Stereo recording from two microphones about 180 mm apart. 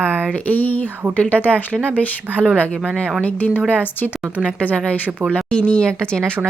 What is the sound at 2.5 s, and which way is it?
Speech, 5° left (ahead or behind).